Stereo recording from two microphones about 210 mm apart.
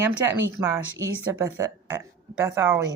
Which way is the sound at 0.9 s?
15° right (ahead or behind).